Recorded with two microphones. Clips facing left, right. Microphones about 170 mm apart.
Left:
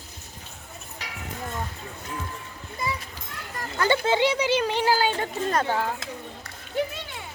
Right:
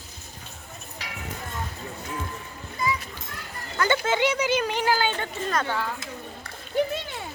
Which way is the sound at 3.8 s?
30° left (ahead or behind).